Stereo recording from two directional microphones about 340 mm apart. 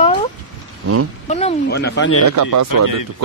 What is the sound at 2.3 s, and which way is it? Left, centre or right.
Speech, right.